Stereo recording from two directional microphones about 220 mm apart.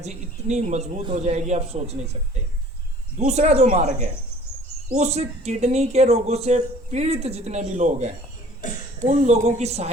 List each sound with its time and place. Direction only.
0.0 s a man's voice: 30° right (ahead or behind)
3.2 s a man's voice: 30° right (ahead or behind)